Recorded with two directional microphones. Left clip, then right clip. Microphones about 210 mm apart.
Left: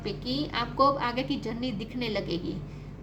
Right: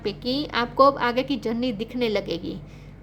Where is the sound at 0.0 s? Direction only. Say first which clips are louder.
Right 5 dB; 55° right (ahead or behind).